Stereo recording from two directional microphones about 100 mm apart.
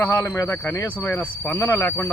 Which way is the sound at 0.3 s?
30° left (ahead or behind).